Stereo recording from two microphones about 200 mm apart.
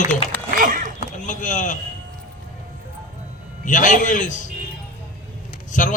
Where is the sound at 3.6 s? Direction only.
40° left (ahead or behind).